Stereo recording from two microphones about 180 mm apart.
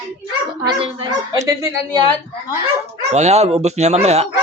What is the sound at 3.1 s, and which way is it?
Speech, 40° right (ahead or behind).